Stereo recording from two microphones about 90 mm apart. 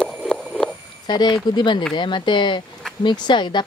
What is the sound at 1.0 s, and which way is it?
Speech, 55° left (ahead or behind).